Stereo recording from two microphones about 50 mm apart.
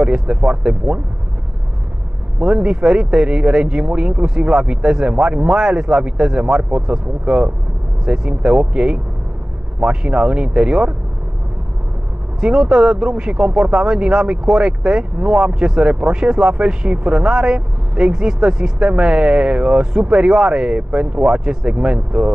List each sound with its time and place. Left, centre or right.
0.0 s speech: centre
2.3 s speech: centre
12.4 s speech: centre